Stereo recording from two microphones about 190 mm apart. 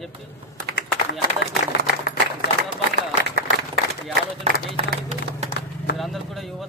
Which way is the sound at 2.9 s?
60° right (ahead or behind).